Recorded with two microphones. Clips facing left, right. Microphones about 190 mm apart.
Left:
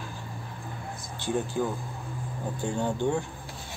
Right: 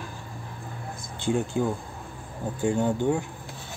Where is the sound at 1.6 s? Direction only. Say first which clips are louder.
Right 3 dB; 15° right (ahead or behind).